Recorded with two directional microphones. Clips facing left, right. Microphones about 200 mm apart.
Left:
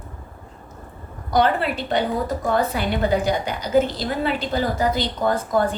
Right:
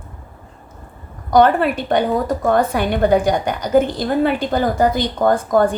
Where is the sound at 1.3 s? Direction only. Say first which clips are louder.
Right 6 dB; 50° right (ahead or behind).